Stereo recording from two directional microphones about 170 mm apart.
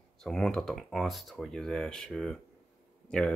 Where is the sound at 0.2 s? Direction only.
Centre (ahead or behind).